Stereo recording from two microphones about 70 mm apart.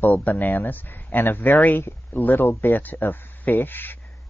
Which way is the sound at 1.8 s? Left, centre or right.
Left.